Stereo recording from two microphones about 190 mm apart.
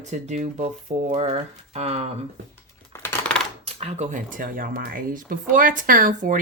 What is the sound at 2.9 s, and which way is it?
Coin, 10° left (ahead or behind).